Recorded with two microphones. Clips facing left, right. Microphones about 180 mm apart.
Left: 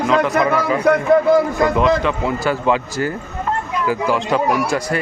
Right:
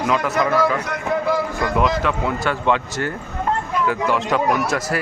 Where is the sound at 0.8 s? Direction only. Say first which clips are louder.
Left 9 dB; 55° left (ahead or behind).